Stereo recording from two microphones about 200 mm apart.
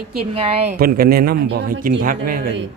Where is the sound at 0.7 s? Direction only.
50° right (ahead or behind).